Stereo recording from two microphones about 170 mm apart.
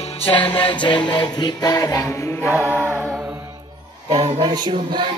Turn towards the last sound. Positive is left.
turn(degrees=-25)  # may be behind; listen again after turning